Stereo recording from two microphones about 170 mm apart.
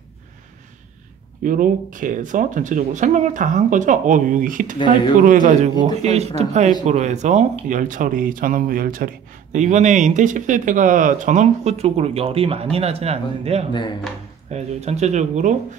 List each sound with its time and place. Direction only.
1.4 s speech: 50° right (ahead or behind)